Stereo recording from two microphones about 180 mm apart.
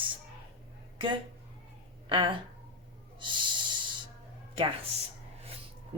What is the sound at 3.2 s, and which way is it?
Snort, 25° right (ahead or behind).